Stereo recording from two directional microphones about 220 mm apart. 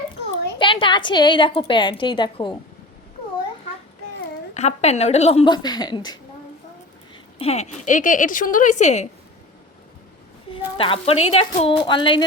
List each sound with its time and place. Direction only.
0.6 s a woman's voice: 20° left (ahead or behind)
4.5 s a woman's voice: 30° left (ahead or behind)
7.3 s speech: 30° left (ahead or behind)
10.8 s a woman's voice: 25° left (ahead or behind)